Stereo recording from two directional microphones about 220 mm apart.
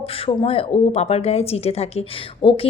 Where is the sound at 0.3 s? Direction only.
25° left (ahead or behind).